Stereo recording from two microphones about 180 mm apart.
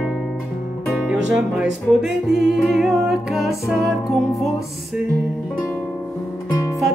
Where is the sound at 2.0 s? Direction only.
Centre (ahead or behind).